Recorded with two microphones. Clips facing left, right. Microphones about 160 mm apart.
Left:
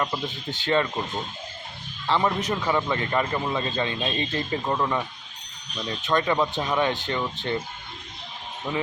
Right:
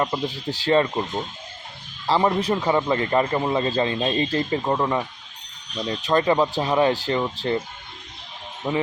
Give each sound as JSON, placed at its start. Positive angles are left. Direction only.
{"t": 0.0, "sound": "a man's voice", "side_deg": -30}
{"t": 2.2, "sound": "a man's voice", "side_deg": -30}
{"t": 4.6, "sound": "speech", "side_deg": -20}
{"t": 5.9, "sound": "a man's voice", "side_deg": -35}
{"t": 8.7, "sound": "speech", "side_deg": -25}